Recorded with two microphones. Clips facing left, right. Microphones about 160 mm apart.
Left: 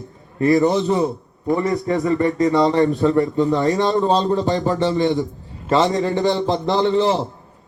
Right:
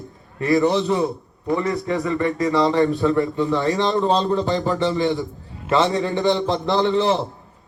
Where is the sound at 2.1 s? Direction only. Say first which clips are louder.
Left 4 dB; 40° left (ahead or behind).